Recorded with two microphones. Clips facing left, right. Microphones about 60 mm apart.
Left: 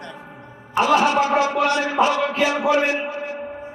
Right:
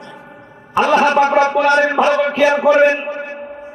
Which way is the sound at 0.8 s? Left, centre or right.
Right.